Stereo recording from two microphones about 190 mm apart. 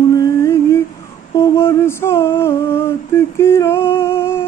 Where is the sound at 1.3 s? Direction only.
15° left (ahead or behind).